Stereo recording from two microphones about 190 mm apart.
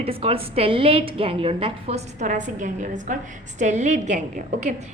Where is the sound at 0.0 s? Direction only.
30° right (ahead or behind).